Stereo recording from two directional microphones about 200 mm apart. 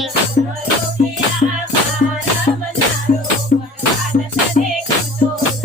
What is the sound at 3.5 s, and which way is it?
Music, 40° left (ahead or behind).